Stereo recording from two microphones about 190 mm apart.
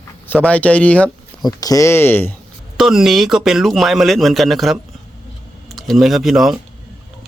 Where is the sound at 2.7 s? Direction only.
5° right (ahead or behind).